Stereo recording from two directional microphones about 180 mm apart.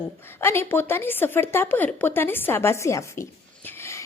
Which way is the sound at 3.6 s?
15° left (ahead or behind).